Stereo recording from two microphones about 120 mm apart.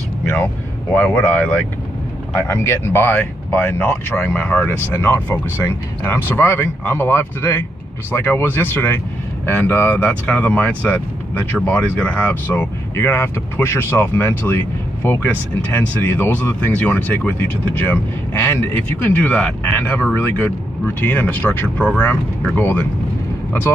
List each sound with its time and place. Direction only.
0.9 s speech: 10° left (ahead or behind)